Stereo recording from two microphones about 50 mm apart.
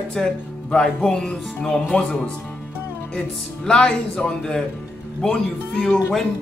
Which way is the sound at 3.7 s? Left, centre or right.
Centre.